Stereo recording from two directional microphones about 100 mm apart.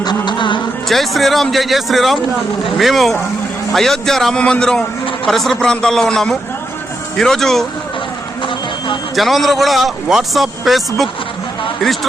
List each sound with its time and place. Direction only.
0.0 s music: 45° left (ahead or behind)
0.9 s a man's voice: centre (ahead or behind)
9.1 s a man's voice: centre (ahead or behind)